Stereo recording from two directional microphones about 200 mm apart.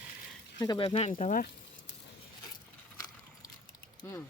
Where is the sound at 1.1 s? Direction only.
40° left (ahead or behind).